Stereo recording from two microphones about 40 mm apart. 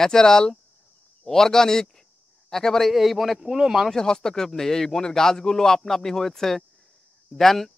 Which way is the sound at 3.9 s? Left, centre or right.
Centre.